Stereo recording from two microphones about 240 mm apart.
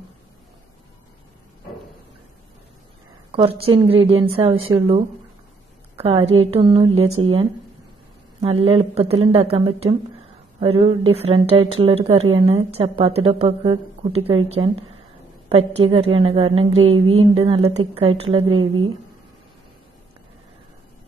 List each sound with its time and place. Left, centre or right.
3.3 s a woman's voice: right
8.4 s a woman's voice: right